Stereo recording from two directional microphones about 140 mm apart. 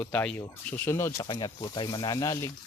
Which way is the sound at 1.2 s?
30° left (ahead or behind).